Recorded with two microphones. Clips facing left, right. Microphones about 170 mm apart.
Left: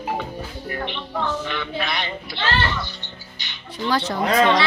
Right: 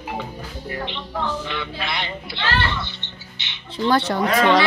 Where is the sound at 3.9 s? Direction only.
65° right (ahead or behind).